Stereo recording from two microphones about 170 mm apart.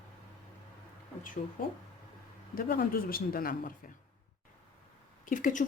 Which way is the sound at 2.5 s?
55° left (ahead or behind).